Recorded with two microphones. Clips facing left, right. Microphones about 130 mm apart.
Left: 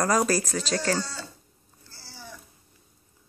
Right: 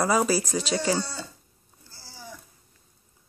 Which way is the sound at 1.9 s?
10° right (ahead or behind).